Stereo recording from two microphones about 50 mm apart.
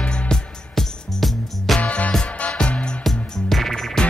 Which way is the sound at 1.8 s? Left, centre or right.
Left.